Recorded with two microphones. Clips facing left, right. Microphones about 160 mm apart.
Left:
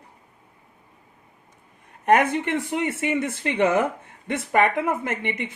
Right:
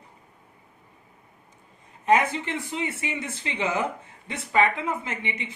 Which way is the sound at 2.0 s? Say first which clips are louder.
Left 3 dB; 60° left (ahead or behind).